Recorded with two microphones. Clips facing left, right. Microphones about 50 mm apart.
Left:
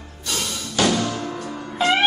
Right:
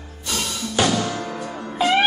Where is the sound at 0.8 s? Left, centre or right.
Centre.